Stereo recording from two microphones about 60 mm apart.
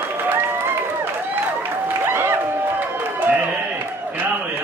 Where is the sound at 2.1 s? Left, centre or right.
Right.